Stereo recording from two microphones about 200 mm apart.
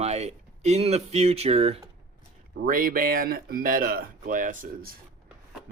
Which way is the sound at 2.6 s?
45° right (ahead or behind).